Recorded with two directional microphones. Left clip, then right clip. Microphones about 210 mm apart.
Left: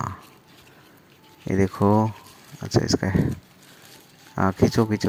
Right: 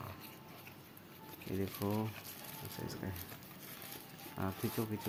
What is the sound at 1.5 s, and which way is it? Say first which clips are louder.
Speech: left 19 dB; 45° left (ahead or behind).